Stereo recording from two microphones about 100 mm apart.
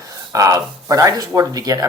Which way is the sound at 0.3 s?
35° right (ahead or behind).